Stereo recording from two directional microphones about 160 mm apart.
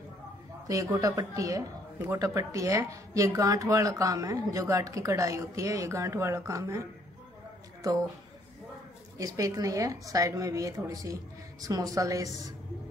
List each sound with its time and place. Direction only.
0.7 s speech: 20° right (ahead or behind)
9.2 s speech: 20° right (ahead or behind)